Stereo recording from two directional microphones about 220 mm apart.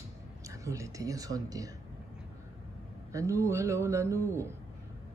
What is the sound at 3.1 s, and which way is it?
Speech, 15° right (ahead or behind).